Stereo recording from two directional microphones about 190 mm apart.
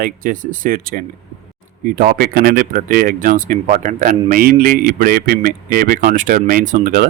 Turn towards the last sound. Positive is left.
turn(degrees=-45)  # may be behind; listen again after turning